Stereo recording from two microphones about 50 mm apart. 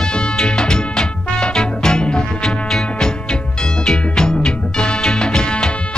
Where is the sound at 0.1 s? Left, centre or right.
Centre.